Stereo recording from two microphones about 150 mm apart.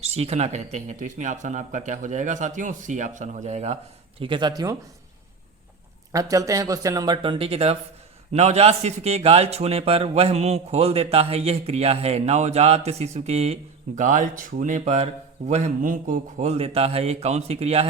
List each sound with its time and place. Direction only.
0.0 s speech: 45° right (ahead or behind)
4.2 s speech: 30° right (ahead or behind)
6.1 s a man's voice: 20° right (ahead or behind); by 17.8 s 45° right (ahead or behind)